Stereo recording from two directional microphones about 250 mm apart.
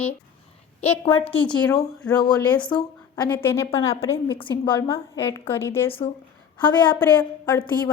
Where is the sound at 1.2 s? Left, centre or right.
Centre.